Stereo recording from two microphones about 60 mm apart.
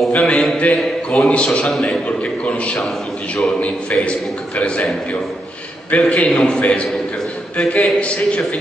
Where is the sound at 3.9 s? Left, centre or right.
Left.